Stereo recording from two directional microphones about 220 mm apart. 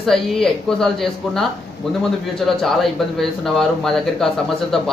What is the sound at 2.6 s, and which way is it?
Speech, centre (ahead or behind).